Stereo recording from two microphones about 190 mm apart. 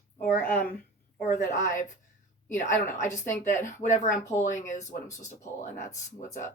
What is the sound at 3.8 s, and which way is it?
Speech, 40° left (ahead or behind).